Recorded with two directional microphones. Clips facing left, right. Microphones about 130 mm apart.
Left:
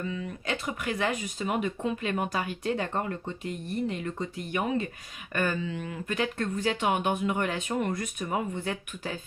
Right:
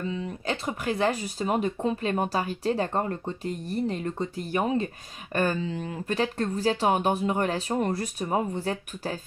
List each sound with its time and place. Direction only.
0.0 s speech: 30° right (ahead or behind)